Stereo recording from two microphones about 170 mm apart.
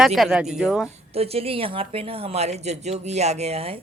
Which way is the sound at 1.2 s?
35° right (ahead or behind).